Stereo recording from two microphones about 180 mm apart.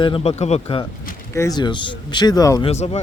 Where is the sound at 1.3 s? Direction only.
15° left (ahead or behind).